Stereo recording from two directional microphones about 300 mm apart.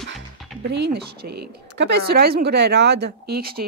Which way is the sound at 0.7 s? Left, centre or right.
Right.